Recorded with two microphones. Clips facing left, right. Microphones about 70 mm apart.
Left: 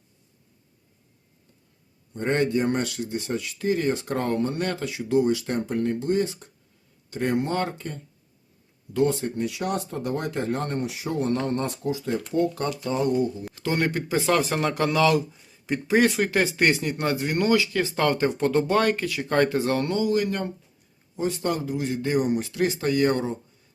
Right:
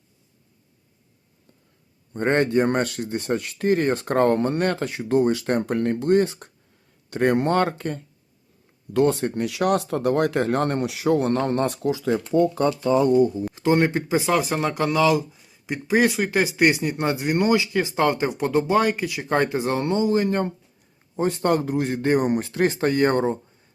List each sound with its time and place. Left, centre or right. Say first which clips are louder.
2.1 s speech: right 4 dB; right
11.3 s speech: right 4 dB; right
13.5 s speech: right 6 dB; right
14.3 s speech: right 1 dB; centre; by 20.5 s right
21.2 s speech: right 5 dB; right